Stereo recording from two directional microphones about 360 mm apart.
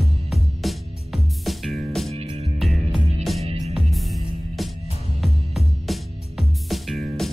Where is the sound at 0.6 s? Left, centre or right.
Centre.